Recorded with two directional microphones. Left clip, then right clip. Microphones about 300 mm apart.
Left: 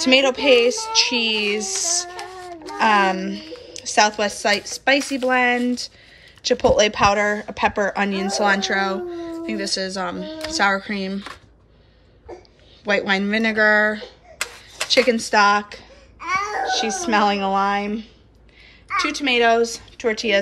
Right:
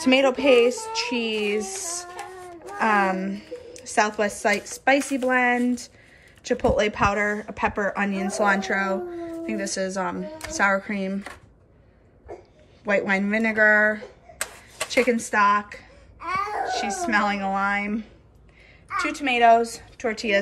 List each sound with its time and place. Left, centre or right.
0.0 s speech: centre
12.8 s speech: centre